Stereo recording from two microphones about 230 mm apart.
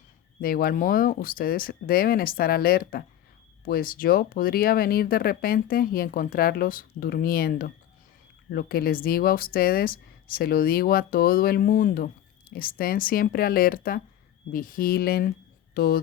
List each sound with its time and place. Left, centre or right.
0.4 s speech: left